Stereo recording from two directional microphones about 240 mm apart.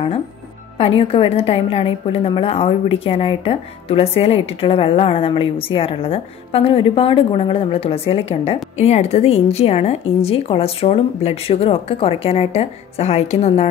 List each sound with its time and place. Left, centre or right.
0.7 s a woman's voice: left